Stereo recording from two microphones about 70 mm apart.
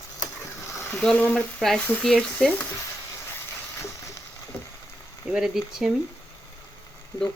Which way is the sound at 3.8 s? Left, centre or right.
Left.